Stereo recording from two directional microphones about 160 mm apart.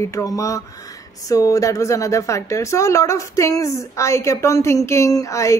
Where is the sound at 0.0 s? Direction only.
20° left (ahead or behind).